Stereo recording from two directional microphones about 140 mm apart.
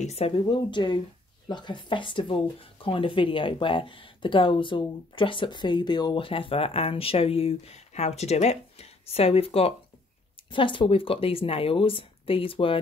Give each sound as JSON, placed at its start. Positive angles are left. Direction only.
{"t": 0.0, "sound": "speech", "side_deg": 50}
{"t": 0.5, "sound": "speech", "side_deg": 35}